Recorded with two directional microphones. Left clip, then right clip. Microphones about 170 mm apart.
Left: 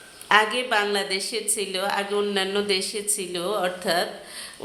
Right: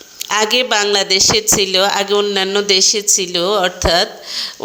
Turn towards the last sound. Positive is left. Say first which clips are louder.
# right 10 dB
turn(degrees=-45)  # may be behind; listen again after turning